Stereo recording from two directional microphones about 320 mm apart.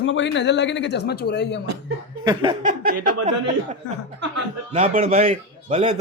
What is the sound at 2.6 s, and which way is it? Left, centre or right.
A man's voice, right.